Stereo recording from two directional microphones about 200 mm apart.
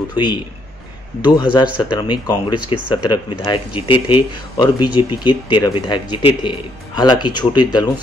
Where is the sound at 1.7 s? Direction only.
20° left (ahead or behind).